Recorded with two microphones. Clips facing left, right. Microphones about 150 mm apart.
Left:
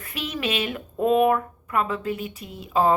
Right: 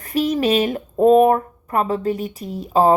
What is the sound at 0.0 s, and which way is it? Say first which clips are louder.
Speech: right 10 dB; 40° right (ahead or behind).